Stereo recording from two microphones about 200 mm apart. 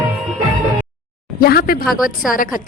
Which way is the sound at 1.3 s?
50° left (ahead or behind).